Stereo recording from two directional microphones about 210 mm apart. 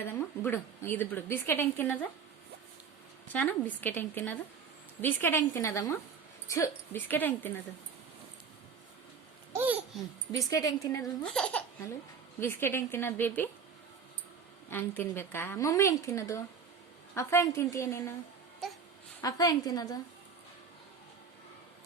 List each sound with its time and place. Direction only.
0.4 s a woman's voice: 10° left (ahead or behind)
3.3 s a woman's voice: 10° left (ahead or behind)
9.5 s babbling: 10° right (ahead or behind)
10.3 s a woman's voice: 15° left (ahead or behind)
12.4 s a woman's voice: 10° left (ahead or behind)
14.7 s a woman's voice: 10° left (ahead or behind)
19.2 s a woman's voice: 20° left (ahead or behind)